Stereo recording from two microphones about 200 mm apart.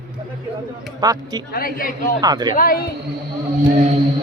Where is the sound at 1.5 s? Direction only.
45° left (ahead or behind).